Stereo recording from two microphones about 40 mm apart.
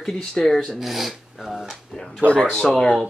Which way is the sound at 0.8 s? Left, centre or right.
Centre.